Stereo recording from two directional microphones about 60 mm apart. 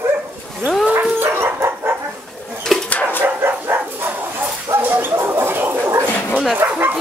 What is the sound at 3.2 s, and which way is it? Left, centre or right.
Dog, right.